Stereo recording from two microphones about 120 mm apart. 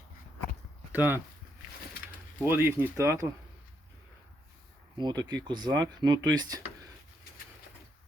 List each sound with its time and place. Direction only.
0.9 s speech: 15° right (ahead or behind)
2.4 s speech: 20° right (ahead or behind)
4.9 s speech: 35° right (ahead or behind)